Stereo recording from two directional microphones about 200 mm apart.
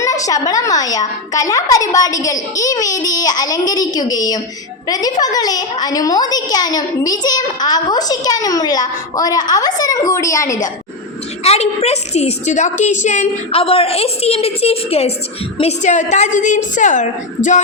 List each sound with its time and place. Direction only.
0.0 s a child's voice: 15° left (ahead or behind)
11.4 s a woman's voice: 30° left (ahead or behind)